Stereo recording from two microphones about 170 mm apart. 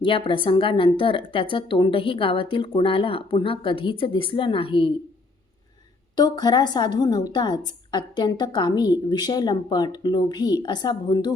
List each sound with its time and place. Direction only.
0.0 s a woman's voice: 30° left (ahead or behind)
6.1 s a woman's voice: 25° left (ahead or behind)